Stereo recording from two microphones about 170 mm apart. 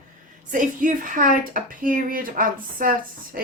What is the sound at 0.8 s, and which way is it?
Speech, 50° right (ahead or behind).